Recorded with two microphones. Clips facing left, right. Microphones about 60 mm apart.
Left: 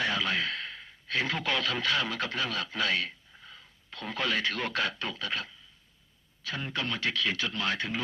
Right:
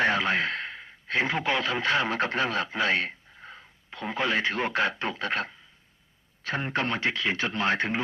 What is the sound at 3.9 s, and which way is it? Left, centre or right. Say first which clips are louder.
Speech: right 4 dB; right.